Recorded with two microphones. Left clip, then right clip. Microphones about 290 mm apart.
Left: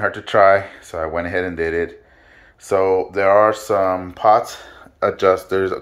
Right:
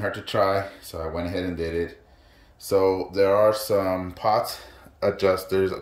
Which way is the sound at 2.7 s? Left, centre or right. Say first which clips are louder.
Left 4 dB; centre.